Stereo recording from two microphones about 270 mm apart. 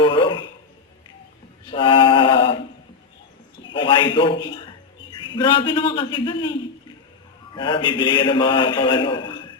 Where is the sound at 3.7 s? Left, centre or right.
Centre.